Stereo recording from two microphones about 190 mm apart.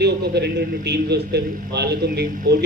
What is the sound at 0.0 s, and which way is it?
A man's voice, 60° right (ahead or behind).